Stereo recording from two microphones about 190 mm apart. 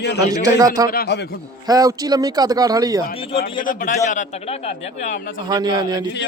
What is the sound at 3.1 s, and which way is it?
Speech, 30° left (ahead or behind).